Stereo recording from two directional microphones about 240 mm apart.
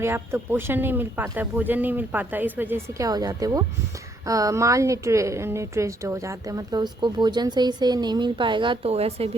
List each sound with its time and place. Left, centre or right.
0.0 s a woman's voice: centre